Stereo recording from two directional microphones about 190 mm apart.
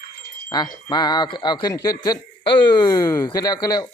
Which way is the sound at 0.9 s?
20° left (ahead or behind).